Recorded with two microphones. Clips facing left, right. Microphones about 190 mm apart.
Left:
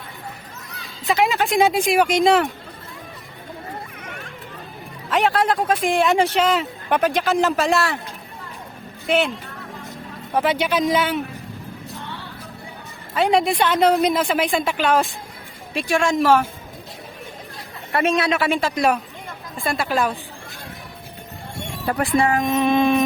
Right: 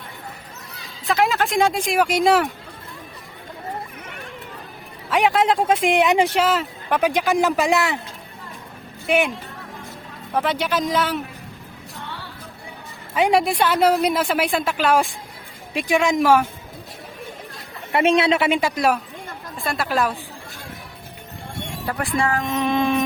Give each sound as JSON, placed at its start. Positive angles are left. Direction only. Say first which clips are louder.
{"t": 1.0, "sound": "speech", "louder": "left 1 dB", "side_deg": 0}
{"t": 5.0, "sound": "speech", "louder": "right 1 dB", "side_deg": -15}
{"t": 7.0, "sound": "a woman's voice", "louder": "right 1 dB", "side_deg": -10}
{"t": 9.0, "sound": "speech", "louder": "even", "side_deg": -10}
{"t": 10.3, "sound": "speech", "louder": "left 2 dB", "side_deg": 0}
{"t": 13.1, "sound": "a woman's voice", "louder": "even", "side_deg": -10}
{"t": 15.7, "sound": "a woman's voice", "louder": "right 1 dB", "side_deg": -15}
{"t": 17.9, "sound": "speech", "louder": "right 2 dB", "side_deg": -25}
{"t": 19.6, "sound": "speech", "louder": "left 1 dB", "side_deg": 0}
{"t": 22.2, "sound": "a sound", "louder": "left 2 dB", "side_deg": 15}